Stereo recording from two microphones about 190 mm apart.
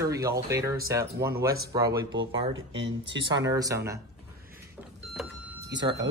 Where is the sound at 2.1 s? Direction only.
80° right.